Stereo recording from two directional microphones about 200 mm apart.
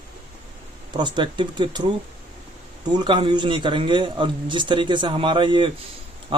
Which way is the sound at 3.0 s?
25° right (ahead or behind).